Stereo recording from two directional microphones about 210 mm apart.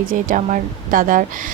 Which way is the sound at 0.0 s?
40° right (ahead or behind).